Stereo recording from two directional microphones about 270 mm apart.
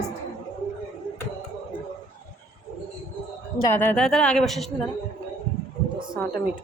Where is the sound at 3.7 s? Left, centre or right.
Centre.